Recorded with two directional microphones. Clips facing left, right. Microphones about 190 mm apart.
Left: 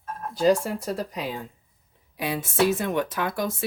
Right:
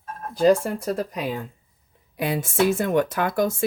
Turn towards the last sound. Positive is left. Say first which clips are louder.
# right 5 dB
turn(degrees=-50)  # may be behind; listen again after turning